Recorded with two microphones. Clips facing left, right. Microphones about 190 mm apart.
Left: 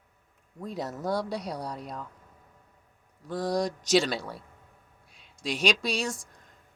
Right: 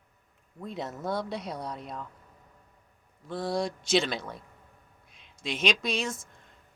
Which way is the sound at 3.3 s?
40° left (ahead or behind).